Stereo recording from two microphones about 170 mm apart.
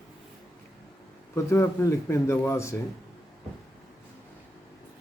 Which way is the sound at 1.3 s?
15° left (ahead or behind).